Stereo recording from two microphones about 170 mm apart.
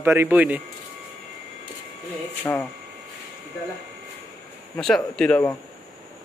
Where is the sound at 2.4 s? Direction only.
10° left (ahead or behind).